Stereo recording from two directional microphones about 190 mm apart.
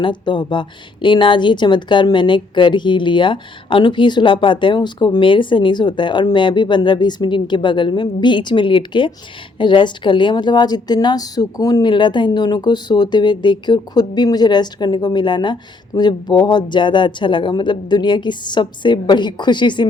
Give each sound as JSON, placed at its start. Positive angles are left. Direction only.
{"t": 0.0, "sound": "a woman's voice", "side_deg": 25}